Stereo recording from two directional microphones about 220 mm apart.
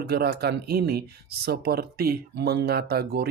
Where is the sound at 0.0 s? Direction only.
45° right (ahead or behind).